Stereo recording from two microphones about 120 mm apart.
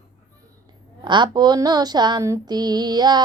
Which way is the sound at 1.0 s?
40° right (ahead or behind).